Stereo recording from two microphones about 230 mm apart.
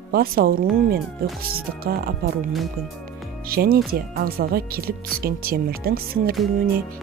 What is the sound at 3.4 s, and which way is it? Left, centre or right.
Speech, right.